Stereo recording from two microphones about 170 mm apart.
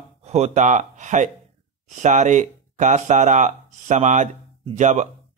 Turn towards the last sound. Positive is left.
turn(degrees=-45)  # may be behind; listen again after turning